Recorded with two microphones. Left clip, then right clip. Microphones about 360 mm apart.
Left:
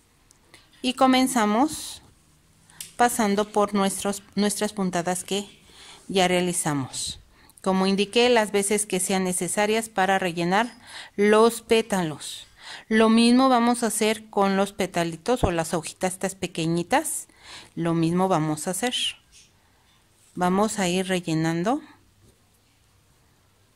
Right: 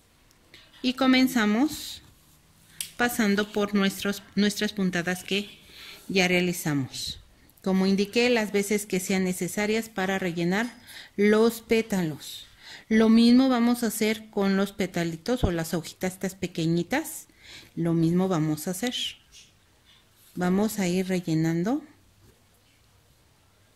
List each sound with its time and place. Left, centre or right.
0.5 s speech: left
20.3 s speech: left